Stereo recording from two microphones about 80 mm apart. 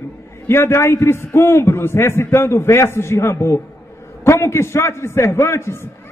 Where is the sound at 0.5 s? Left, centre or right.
Left.